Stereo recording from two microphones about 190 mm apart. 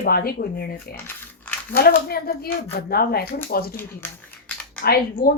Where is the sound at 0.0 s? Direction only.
50° left (ahead or behind).